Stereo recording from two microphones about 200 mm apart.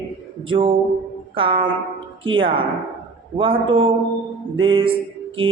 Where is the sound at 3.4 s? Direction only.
25° right (ahead or behind).